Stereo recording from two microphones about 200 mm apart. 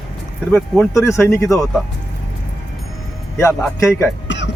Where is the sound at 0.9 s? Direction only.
15° left (ahead or behind).